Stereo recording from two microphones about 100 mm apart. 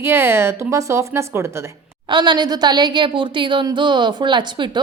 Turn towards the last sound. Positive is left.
turn(degrees=-50)  # may be behind; listen again after turning